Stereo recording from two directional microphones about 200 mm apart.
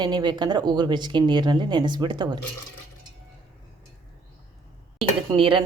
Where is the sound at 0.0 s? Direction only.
20° right (ahead or behind).